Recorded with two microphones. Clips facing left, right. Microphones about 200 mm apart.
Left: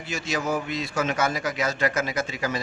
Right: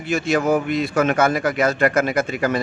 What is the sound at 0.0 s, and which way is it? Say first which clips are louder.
A man's voice: right 9 dB; 55° right (ahead or behind).